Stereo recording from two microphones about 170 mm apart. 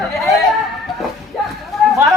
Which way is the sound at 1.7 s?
Centre (ahead or behind).